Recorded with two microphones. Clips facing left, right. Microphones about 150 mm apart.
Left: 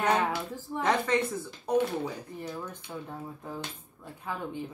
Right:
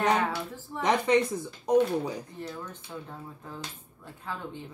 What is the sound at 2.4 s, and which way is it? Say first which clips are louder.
Speech: left 1 dB; 10° left (ahead or behind).